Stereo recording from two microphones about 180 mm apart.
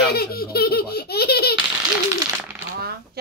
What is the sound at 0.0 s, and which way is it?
Baby laughter, 60° left (ahead or behind).